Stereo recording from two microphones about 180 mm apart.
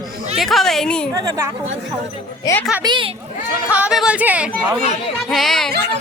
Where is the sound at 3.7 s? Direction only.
5° right (ahead or behind).